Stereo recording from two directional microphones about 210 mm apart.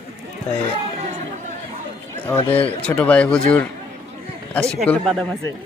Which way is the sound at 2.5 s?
25° left (ahead or behind).